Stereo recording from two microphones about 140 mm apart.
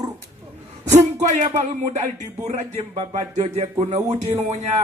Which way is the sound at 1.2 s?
55° right (ahead or behind).